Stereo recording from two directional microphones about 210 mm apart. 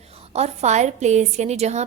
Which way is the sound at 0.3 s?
30° right (ahead or behind).